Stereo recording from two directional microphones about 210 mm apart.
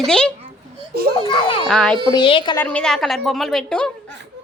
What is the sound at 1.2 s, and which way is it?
Speech, 25° left (ahead or behind).